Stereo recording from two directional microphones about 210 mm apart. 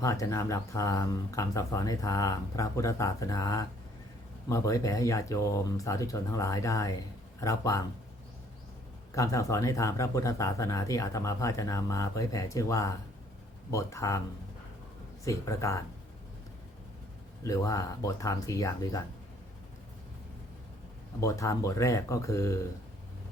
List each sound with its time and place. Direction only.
0.0 s speech: 15° left (ahead or behind)
9.1 s speech: 15° left (ahead or behind)
15.2 s speech: 15° left (ahead or behind)
17.4 s speech: 15° left (ahead or behind)
21.2 s speech: 15° left (ahead or behind)